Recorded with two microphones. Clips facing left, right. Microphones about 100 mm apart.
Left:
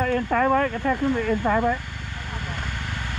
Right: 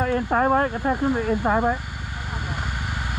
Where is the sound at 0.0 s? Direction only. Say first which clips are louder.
Right 1 dB; 30° right (ahead or behind).